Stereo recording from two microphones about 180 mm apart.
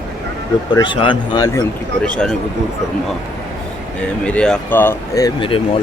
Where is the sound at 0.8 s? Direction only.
25° left (ahead or behind).